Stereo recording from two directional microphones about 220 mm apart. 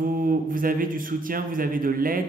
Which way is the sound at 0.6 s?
40° right (ahead or behind).